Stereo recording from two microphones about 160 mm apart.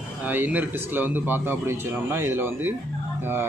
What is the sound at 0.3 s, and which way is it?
A man's voice, 10° right (ahead or behind).